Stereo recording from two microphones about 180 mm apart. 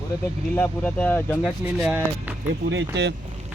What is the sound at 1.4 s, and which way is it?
Speech, 5° right (ahead or behind).